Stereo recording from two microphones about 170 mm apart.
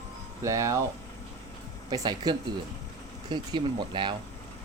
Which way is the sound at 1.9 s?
25° right (ahead or behind).